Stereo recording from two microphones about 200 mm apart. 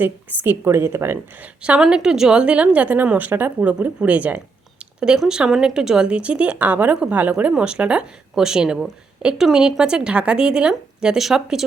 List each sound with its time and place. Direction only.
0.0 s a woman's voice: 10° right (ahead or behind)